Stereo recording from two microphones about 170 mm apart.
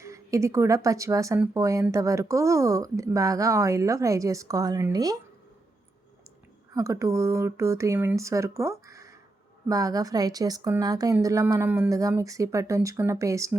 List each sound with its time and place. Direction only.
0.0 s speech: 20° right (ahead or behind)
6.7 s speech: 20° right (ahead or behind)